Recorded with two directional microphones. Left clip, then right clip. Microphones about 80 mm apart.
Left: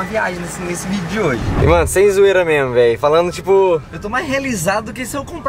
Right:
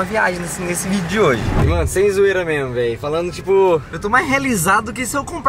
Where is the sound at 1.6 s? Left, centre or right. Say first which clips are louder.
Left 6 dB; left.